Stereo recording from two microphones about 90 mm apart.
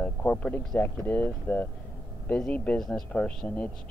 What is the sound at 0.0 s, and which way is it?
Speech, 15° left (ahead or behind).